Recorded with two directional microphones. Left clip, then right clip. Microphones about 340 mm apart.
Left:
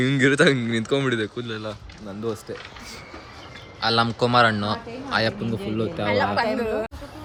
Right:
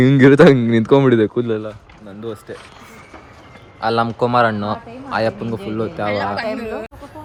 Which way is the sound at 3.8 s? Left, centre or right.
Centre.